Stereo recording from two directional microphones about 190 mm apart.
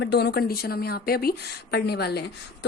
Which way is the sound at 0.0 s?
60° left (ahead or behind).